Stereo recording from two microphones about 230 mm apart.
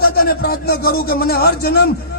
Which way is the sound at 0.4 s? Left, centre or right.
Left.